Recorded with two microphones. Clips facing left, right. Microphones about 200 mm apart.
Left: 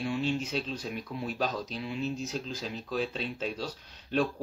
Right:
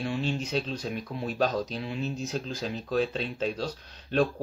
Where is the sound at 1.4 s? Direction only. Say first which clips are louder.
Right 7 dB; 45° right (ahead or behind).